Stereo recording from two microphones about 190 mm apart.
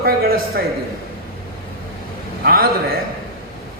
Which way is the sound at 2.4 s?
55° right (ahead or behind).